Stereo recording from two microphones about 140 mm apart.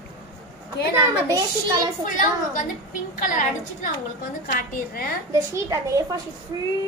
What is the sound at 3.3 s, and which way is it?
Speech, 70° left (ahead or behind).